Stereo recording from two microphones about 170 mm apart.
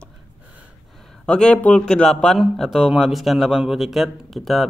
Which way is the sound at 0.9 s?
5° left (ahead or behind).